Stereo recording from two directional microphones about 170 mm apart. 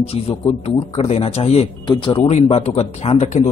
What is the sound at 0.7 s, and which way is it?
A man's voice, 40° left (ahead or behind).